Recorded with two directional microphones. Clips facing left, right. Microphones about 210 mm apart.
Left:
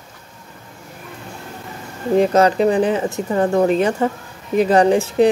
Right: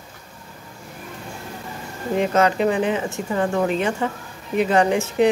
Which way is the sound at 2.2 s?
35° left (ahead or behind).